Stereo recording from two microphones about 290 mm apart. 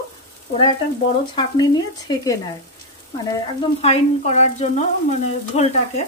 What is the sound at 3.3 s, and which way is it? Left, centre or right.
Speech, centre.